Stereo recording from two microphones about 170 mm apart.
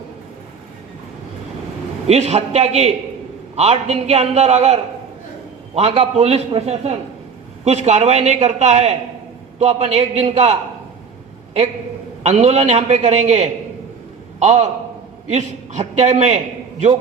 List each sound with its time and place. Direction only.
2.0 s a man's voice: 40° right (ahead or behind)
5.9 s a man's voice: 35° right (ahead or behind)
12.2 s a man's voice: 40° right (ahead or behind)